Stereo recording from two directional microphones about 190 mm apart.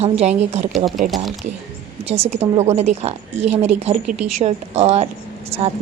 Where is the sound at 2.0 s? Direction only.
30° right (ahead or behind).